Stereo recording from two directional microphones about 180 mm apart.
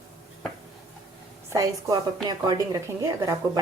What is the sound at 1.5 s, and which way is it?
A woman's voice, 20° right (ahead or behind).